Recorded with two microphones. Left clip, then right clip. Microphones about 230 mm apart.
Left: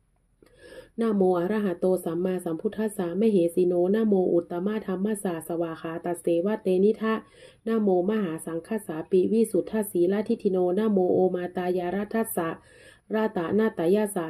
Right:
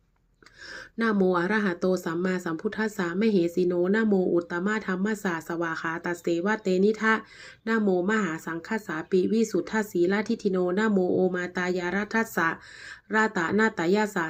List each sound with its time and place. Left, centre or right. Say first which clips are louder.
0.9 s speech: left 1 dB; right